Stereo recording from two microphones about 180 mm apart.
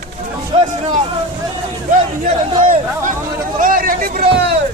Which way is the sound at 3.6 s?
50° right (ahead or behind).